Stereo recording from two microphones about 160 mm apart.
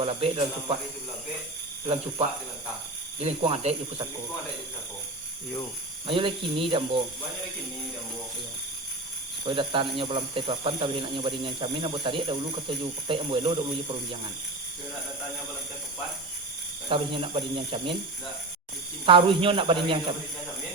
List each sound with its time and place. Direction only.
0.0 s speech: 35° right (ahead or behind)
3.2 s speech: 40° right (ahead or behind)
6.1 s speech: 35° right (ahead or behind)
9.4 s speech: 35° right (ahead or behind)
16.9 s speech: 35° right (ahead or behind)
19.0 s speech: 35° right (ahead or behind)